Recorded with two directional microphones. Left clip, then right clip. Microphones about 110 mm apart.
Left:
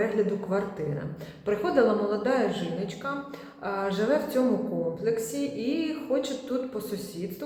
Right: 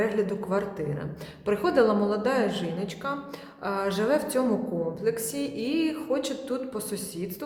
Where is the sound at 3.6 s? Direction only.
30° right (ahead or behind).